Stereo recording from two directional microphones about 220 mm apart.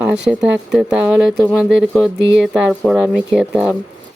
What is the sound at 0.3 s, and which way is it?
Speech, 5° right (ahead or behind).